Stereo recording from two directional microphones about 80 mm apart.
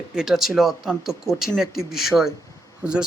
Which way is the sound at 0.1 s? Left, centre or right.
Centre.